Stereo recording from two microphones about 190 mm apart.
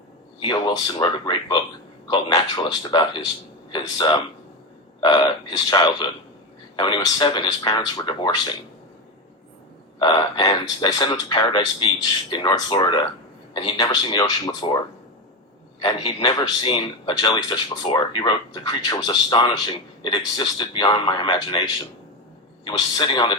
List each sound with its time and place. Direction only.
0.4 s a man's voice: 20° left (ahead or behind)
10.0 s a man's voice: 25° left (ahead or behind)
15.8 s a man's voice: 25° left (ahead or behind)
22.6 s a man's voice: 25° left (ahead or behind)